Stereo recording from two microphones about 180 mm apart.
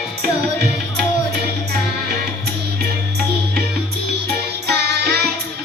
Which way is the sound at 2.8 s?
60° right (ahead or behind).